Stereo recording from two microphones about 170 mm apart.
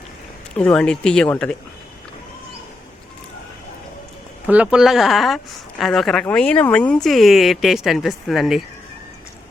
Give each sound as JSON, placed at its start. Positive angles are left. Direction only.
{"t": 0.5, "sound": "speech", "side_deg": 5}
{"t": 4.4, "sound": "speech", "side_deg": -10}